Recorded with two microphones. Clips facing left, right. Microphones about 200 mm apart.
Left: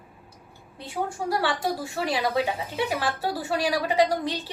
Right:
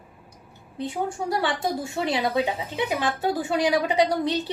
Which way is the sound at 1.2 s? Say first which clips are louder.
Even; 20° right (ahead or behind).